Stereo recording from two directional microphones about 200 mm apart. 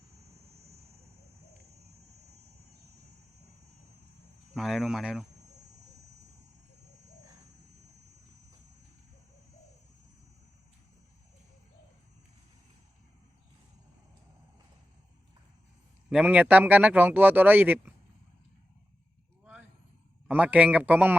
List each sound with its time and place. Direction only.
4.5 s speech: centre (ahead or behind)
16.0 s speech: 5° right (ahead or behind)
20.2 s speech: 5° right (ahead or behind)